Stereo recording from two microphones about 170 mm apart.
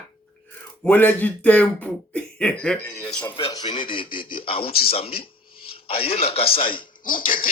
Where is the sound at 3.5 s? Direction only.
25° left (ahead or behind).